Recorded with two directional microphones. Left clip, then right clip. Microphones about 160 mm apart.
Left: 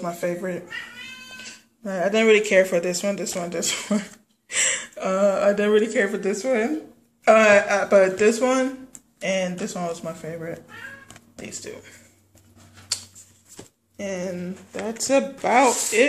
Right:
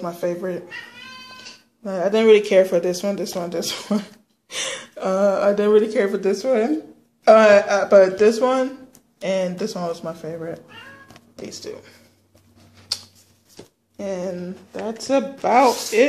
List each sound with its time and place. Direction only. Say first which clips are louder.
0.0 s speech: right 2 dB; centre (ahead or behind)
13.9 s speech: right 2 dB; 5° right (ahead or behind)
15.6 s speech: right 2 dB; 15° right (ahead or behind)